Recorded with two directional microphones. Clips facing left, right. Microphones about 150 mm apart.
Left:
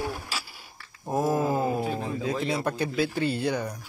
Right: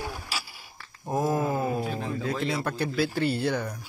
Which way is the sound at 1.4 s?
25° left (ahead or behind).